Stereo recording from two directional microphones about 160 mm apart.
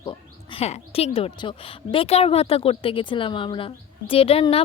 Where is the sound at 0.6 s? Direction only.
40° left (ahead or behind).